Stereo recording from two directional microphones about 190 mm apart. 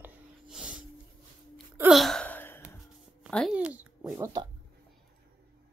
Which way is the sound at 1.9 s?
Centre (ahead or behind).